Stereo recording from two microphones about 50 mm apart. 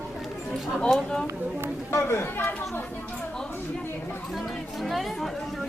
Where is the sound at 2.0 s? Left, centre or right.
Left.